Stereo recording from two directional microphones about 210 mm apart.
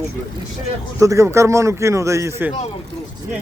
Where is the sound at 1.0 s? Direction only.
15° right (ahead or behind).